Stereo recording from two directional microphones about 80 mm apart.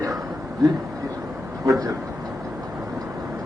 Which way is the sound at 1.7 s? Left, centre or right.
Right.